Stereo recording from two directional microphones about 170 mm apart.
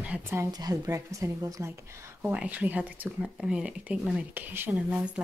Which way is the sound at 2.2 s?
5° right (ahead or behind).